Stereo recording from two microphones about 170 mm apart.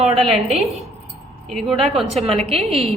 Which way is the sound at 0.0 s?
Centre (ahead or behind).